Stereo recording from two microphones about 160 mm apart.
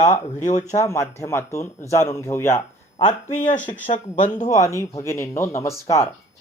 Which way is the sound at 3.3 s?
50° left (ahead or behind).